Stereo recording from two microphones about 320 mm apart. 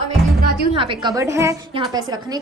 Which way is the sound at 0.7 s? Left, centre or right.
Centre.